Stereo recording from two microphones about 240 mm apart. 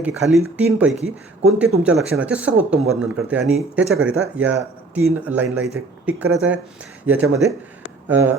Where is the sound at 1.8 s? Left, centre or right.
Centre.